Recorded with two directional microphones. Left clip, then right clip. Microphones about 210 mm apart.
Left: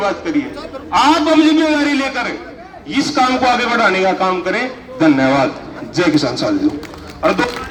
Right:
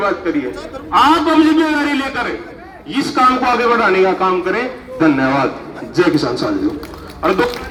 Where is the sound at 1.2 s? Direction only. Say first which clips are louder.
Even; 30° left (ahead or behind).